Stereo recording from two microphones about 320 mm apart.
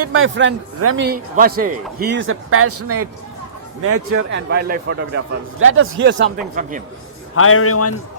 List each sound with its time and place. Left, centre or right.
0.0 s a man's voice: right
1.0 s a man's voice: right
6.6 s a man's voice: right
7.3 s a man's voice: left